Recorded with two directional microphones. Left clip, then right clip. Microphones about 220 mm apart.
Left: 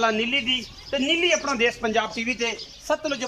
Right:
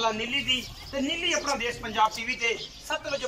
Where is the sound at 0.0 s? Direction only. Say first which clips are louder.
Left 5 dB; 40° left (ahead or behind).